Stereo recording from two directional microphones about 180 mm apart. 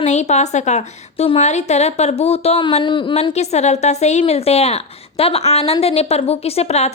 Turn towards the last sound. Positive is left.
turn(degrees=35)  # may be behind; listen again after turning